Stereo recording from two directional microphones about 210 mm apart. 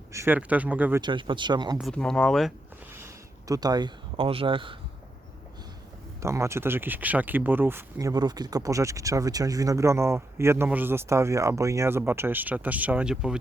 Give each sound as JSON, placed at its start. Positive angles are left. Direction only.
{"t": 0.1, "sound": "speech", "side_deg": -10}
{"t": 1.0, "sound": "speech", "side_deg": -20}
{"t": 1.8, "sound": "speech", "side_deg": 5}
{"t": 2.9, "sound": "speech", "side_deg": -15}
{"t": 6.2, "sound": "speech", "side_deg": -15}